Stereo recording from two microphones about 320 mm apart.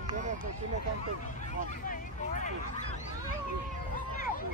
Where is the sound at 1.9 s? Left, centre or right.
Left.